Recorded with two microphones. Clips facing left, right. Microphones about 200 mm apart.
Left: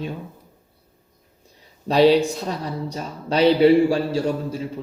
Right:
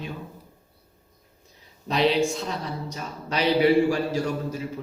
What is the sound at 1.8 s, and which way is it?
A man's voice, 35° left (ahead or behind).